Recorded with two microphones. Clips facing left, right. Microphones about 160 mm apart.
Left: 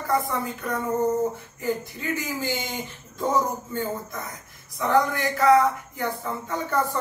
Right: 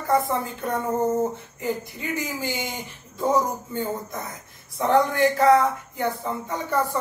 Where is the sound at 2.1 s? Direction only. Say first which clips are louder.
Right 1 dB; 15° right (ahead or behind).